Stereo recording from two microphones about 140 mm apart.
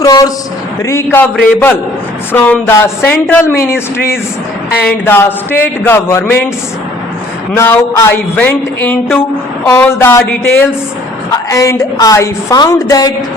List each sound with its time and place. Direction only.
0.0 s speech: 25° left (ahead or behind)
7.5 s a woman's voice: 20° left (ahead or behind)